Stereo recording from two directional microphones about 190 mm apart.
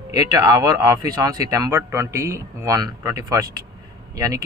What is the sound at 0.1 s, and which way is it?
Speech, 20° right (ahead or behind).